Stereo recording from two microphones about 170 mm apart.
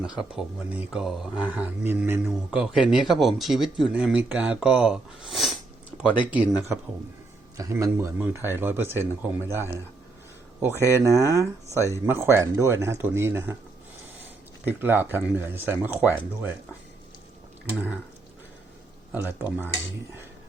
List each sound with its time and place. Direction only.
0.0 s speech: 5° right (ahead or behind)
7.5 s speech: 20° right (ahead or behind)
10.8 s speech: 20° right (ahead or behind)
14.6 s speech: 10° right (ahead or behind)
19.1 s speech: 10° right (ahead or behind)